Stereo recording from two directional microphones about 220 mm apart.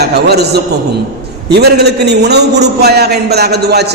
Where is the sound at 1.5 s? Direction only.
50° right (ahead or behind).